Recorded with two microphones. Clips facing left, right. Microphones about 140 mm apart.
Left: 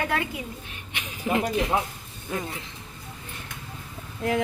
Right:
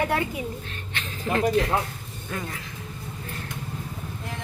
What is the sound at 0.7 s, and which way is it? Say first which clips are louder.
Speech: right 3 dB; 15° left (ahead or behind).